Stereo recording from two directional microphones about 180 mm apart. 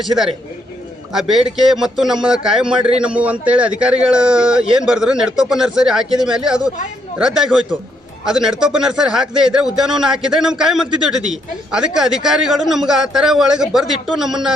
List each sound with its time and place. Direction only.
1.1 s a man's voice: centre (ahead or behind)